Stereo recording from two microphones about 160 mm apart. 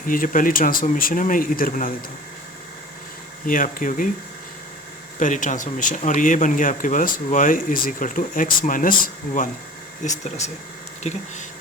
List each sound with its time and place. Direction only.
0.0 s speech: 60° left (ahead or behind)
3.4 s speech: 60° left (ahead or behind)
5.2 s speech: 50° left (ahead or behind)
10.0 s speech: 45° left (ahead or behind)